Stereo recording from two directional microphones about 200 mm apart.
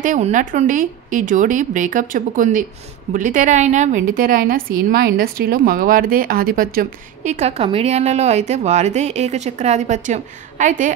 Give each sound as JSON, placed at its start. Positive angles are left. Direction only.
{"t": 0.0, "sound": "a woman's voice", "side_deg": -40}